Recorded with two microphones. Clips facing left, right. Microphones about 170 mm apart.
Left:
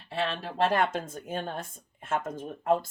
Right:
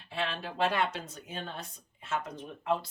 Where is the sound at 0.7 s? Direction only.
50° left (ahead or behind).